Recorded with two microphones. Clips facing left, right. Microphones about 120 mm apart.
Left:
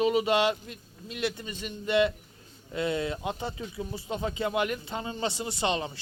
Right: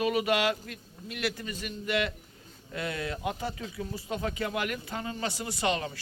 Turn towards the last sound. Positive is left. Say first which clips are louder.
# left 1 dB
turn(degrees=25)  # may be behind; listen again after turning